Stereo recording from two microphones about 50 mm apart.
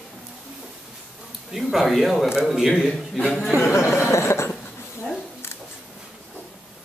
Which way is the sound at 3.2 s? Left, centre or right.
Centre.